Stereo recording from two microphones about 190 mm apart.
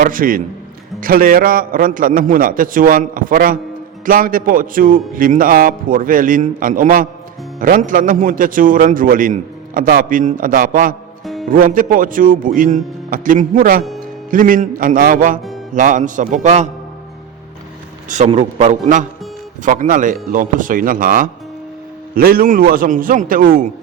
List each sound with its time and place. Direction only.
0.0 s a man's voice: 45° right (ahead or behind)
18.1 s a man's voice: 35° right (ahead or behind)